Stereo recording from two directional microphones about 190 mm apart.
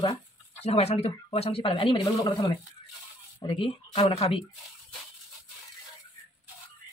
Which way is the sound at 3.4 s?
30° left (ahead or behind).